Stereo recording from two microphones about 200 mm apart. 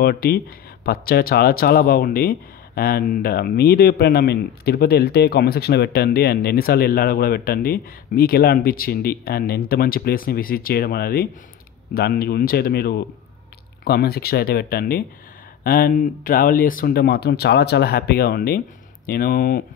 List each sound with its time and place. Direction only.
0.0 s speech: 50° left (ahead or behind)